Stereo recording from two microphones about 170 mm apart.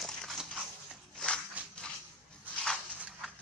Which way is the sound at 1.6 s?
10° right (ahead or behind).